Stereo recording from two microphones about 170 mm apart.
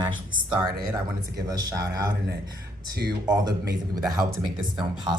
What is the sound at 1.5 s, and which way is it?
Speech, 20° right (ahead or behind).